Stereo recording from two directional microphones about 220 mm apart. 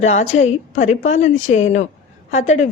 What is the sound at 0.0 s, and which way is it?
A woman's voice, 30° left (ahead or behind).